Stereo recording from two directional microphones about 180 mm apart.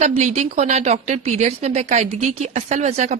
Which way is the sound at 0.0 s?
40° right (ahead or behind).